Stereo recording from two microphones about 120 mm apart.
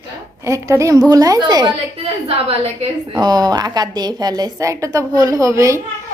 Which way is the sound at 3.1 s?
35° right (ahead or behind).